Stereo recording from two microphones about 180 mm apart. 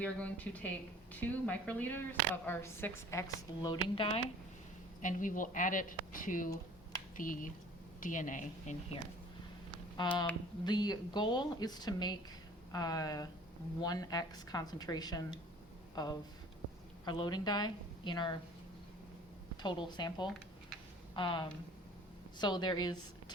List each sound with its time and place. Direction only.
0.0 s a woman's voice: 10° left (ahead or behind); by 4.2 s 30° left (ahead or behind)
5.0 s a woman's voice: 45° left (ahead or behind)
10.0 s a woman's voice: 25° left (ahead or behind)
19.6 s a woman's voice: 25° left (ahead or behind)